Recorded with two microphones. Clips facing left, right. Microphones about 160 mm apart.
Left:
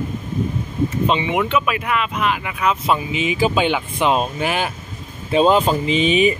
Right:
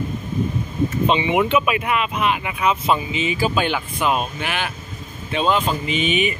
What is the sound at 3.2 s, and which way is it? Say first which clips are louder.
Speech: left 4 dB; 20° left (ahead or behind).